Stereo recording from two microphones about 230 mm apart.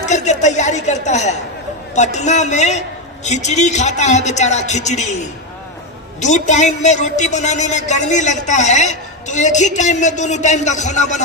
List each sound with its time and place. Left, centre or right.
0.0 s a woman's voice: left
6.1 s speech: left